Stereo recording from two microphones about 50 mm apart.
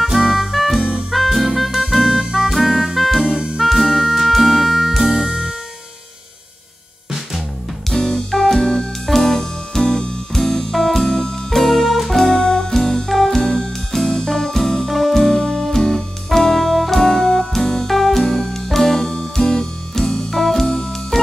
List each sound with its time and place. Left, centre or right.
0.0 s music: centre
3.3 s music: centre
3.6 s music: centre
7.9 s music: centre